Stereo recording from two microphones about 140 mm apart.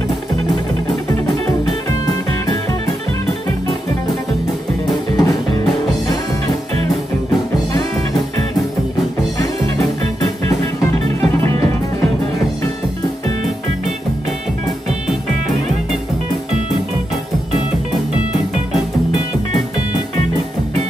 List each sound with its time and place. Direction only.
5.1 s music: 25° left (ahead or behind)